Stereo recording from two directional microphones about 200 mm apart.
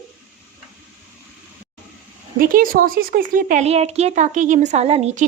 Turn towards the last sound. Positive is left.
turn(degrees=-35)  # may be behind; listen again after turning